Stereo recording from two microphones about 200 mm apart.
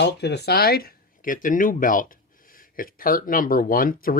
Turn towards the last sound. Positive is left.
turn(degrees=45)  # may be behind; listen again after turning